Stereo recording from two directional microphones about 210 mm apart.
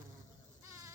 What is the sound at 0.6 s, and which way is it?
Sheep, 15° right (ahead or behind).